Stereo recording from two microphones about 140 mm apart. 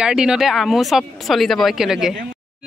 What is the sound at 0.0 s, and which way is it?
Speech, 5° right (ahead or behind).